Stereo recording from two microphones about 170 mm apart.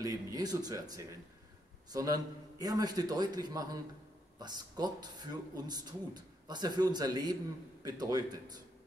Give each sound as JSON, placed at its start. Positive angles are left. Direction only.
{"t": 0.0, "sound": "a man's voice", "side_deg": -20}